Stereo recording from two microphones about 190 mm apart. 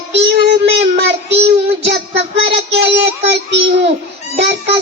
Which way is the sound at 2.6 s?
60° right (ahead or behind).